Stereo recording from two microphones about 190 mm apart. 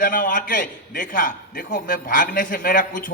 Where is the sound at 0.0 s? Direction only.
45° left (ahead or behind).